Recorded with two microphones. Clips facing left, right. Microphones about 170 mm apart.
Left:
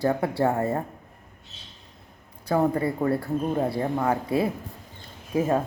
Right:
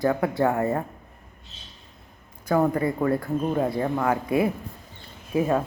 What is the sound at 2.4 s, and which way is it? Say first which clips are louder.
Speech: right 1 dB; 30° left (ahead or behind).